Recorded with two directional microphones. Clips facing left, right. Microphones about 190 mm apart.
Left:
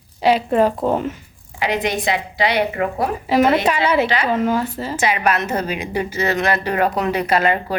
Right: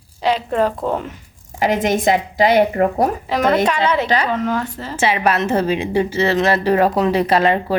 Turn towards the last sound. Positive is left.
turn(degrees=-30)  # may be behind; listen again after turning